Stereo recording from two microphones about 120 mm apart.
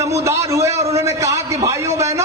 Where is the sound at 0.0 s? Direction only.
25° right (ahead or behind).